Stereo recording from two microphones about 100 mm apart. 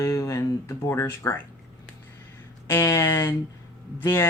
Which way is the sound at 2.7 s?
25° left (ahead or behind).